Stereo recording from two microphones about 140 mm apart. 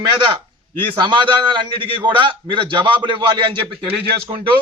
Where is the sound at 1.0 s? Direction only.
35° right (ahead or behind).